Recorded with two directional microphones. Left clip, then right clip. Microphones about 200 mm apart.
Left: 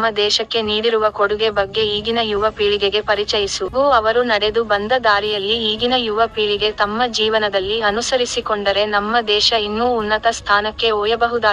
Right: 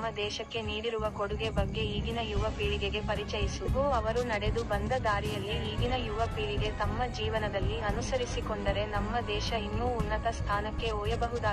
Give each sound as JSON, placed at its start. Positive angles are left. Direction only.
{"t": 0.9, "sound": "speech", "side_deg": 50}
{"t": 2.6, "sound": "speech", "side_deg": 15}
{"t": 3.1, "sound": "speech", "side_deg": 50}